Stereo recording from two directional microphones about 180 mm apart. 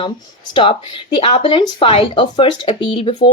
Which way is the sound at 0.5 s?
30° left (ahead or behind).